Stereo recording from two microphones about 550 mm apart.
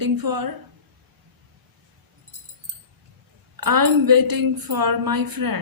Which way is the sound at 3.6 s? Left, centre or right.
Right.